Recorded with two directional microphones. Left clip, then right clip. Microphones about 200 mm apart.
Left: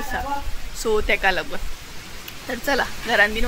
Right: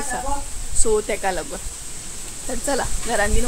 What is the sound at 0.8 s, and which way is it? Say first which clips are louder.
Speech: left 1 dB; centre (ahead or behind).